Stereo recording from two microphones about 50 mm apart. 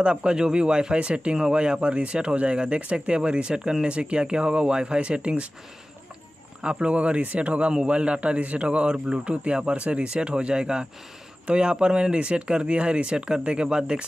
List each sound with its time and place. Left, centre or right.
0.0 s speech: centre
6.6 s speech: centre